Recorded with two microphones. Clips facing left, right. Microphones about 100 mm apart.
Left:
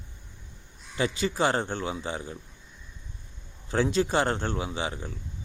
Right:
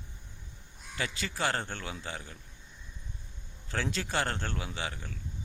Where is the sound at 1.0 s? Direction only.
20° left (ahead or behind).